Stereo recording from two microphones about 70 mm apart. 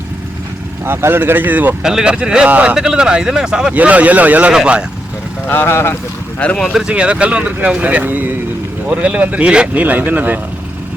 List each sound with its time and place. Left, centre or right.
0.9 s speech: right
1.8 s speech: centre
5.5 s speech: left
6.4 s speech: centre
6.8 s speech: centre